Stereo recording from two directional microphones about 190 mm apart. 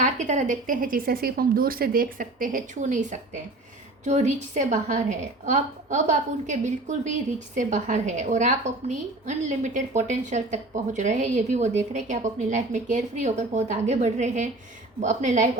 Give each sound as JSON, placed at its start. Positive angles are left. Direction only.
{"t": 0.0, "sound": "a woman's voice", "side_deg": -40}